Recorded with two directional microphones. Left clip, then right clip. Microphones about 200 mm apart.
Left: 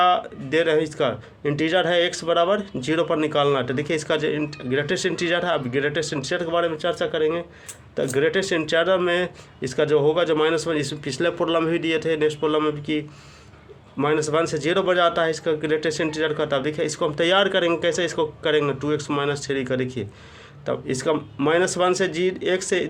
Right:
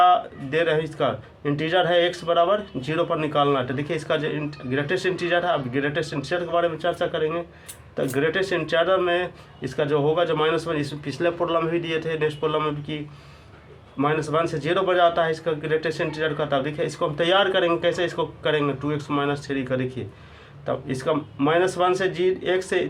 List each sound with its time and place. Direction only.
0.0 s a man's voice: 45° left (ahead or behind)
14.0 s a man's voice: 45° left (ahead or behind)